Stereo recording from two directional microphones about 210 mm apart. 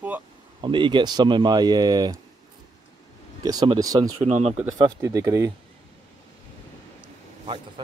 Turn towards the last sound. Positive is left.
turn(degrees=-20)  # may be behind; listen again after turning